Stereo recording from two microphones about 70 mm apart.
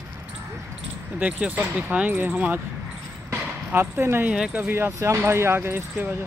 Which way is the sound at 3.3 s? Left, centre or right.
Right.